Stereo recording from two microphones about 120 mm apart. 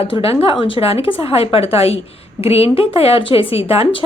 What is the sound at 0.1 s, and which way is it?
A woman's voice, 50° left (ahead or behind).